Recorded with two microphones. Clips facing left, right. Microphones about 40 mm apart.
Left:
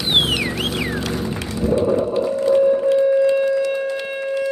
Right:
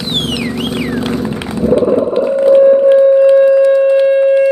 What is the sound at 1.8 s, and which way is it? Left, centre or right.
Whale vocalization, right.